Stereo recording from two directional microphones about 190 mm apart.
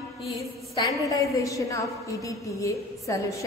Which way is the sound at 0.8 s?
15° left (ahead or behind).